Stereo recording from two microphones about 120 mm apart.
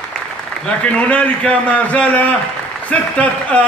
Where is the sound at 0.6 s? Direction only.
10° left (ahead or behind).